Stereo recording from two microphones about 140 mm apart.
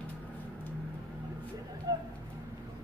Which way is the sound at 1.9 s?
30° right (ahead or behind).